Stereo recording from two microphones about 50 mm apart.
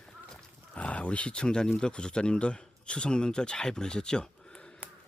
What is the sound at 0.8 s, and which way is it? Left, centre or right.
Speech, left.